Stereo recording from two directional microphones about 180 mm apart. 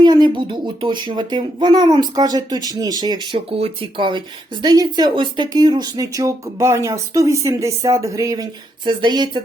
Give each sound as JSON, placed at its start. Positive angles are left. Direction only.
{"t": 0.0, "sound": "speech", "side_deg": -25}